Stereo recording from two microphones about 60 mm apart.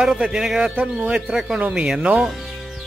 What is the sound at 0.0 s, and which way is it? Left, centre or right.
Speech, centre.